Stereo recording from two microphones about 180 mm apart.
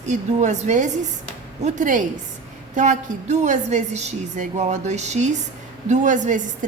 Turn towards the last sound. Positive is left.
turn(degrees=-45)  # may be behind; listen again after turning